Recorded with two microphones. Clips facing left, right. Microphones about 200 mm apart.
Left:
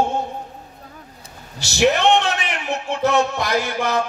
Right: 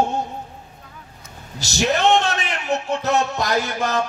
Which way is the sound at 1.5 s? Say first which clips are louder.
Left 4 dB; 40° right (ahead or behind).